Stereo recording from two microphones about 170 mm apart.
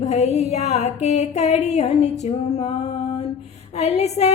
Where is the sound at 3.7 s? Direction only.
40° left (ahead or behind).